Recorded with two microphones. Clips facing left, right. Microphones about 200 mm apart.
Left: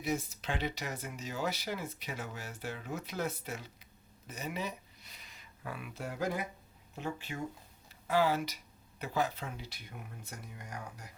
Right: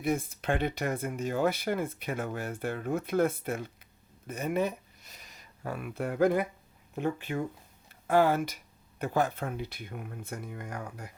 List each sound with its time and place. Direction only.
0.0 s speech: 55° right (ahead or behind)